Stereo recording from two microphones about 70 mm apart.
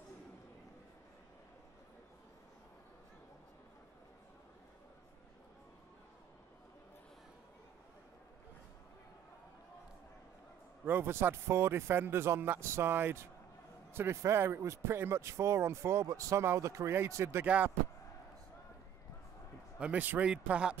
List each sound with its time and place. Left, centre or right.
10.9 s a man's voice: right
19.8 s a man's voice: right